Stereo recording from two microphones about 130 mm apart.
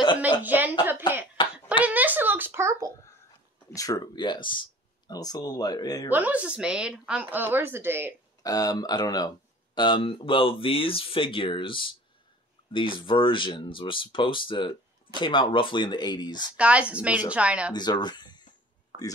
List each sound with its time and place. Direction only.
0.2 s speech: 15° right (ahead or behind)
1.0 s cough: 35° left (ahead or behind)
1.9 s a sound: 15° right (ahead or behind)
3.7 s speech: 30° left (ahead or behind)
6.0 s speech: 15° right (ahead or behind)
8.4 s speech: 30° left (ahead or behind)
16.4 s speech: 10° right (ahead or behind)
17.7 s speech: 35° left (ahead or behind)